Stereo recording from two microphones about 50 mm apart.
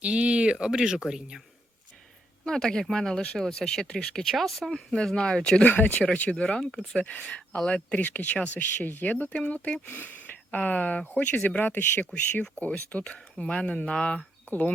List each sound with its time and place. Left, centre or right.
0.0 s a sound: right
0.6 s speech: centre
2.4 s speech: centre
4.2 s speech: centre
5.6 s speech: left
6.3 s speech: centre
9.8 s speech: left